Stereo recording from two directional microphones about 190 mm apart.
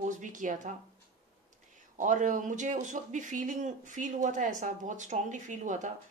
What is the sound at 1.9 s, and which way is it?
Speech, 40° right (ahead or behind).